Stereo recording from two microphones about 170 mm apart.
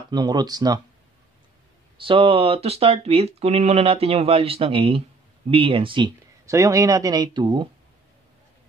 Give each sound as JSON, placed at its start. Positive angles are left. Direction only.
{"t": 0.1, "sound": "speech", "side_deg": -25}
{"t": 2.0, "sound": "speech", "side_deg": -30}